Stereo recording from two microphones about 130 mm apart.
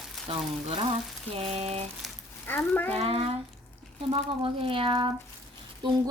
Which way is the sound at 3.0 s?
50° right (ahead or behind).